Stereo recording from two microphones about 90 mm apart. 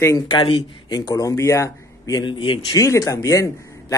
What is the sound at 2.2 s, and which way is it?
Speech, 65° left (ahead or behind).